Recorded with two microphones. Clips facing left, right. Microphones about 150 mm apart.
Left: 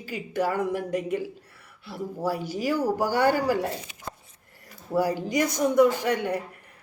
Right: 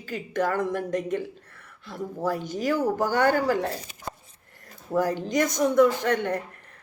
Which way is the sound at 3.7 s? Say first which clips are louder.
Even; 40° right (ahead or behind).